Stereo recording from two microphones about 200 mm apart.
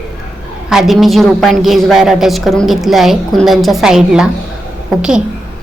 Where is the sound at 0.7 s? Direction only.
Centre (ahead or behind).